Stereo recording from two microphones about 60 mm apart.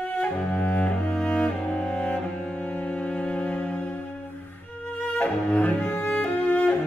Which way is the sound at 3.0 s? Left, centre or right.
Centre.